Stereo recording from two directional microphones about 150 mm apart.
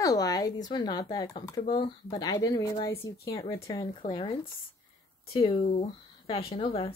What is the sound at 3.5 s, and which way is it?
Speech, 35° left (ahead or behind).